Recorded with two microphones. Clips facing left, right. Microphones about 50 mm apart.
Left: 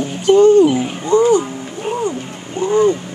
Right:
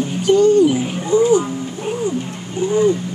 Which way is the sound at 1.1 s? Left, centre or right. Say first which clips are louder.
Left 2 dB; left.